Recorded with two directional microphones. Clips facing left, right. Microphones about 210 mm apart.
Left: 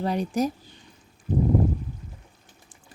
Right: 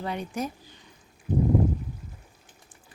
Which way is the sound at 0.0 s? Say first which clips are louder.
Left 6 dB; 40° left (ahead or behind).